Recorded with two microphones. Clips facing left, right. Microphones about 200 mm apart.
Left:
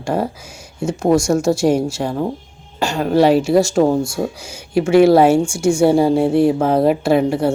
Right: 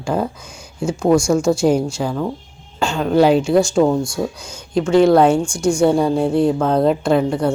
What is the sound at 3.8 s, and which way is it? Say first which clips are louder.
Speech: left 1 dB; 25° left (ahead or behind).